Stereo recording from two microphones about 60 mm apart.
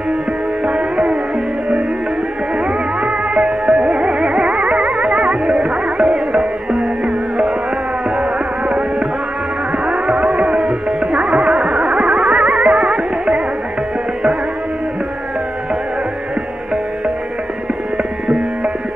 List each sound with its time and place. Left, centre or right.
0.7 s music: centre
3.0 s music: centre
3.4 s music: centre
5.6 s music: centre
8.2 s music: right
9.8 s music: centre
10.6 s music: centre
11.1 s music: centre
17.9 s music: centre